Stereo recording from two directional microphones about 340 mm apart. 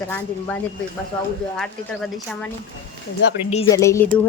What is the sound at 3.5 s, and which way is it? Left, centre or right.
Speech, centre.